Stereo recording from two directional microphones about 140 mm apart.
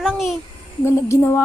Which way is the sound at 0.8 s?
15° left (ahead or behind).